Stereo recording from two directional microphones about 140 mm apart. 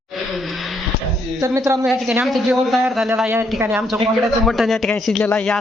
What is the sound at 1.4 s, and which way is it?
Speech, 25° right (ahead or behind).